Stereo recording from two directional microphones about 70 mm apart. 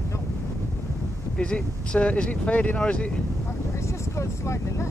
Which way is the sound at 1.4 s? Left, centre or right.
Centre.